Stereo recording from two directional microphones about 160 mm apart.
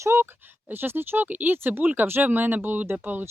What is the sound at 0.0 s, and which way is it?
Speech, 15° right (ahead or behind).